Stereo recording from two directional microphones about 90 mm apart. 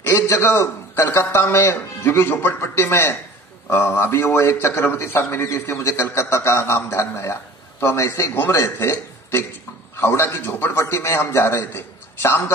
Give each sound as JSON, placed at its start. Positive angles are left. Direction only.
{"t": 0.0, "sound": "a man's voice", "side_deg": 25}